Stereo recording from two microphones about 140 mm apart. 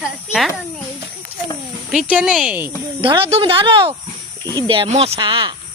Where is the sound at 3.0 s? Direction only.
40° right (ahead or behind).